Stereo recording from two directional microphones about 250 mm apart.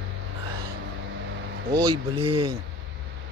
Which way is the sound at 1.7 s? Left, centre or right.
Centre.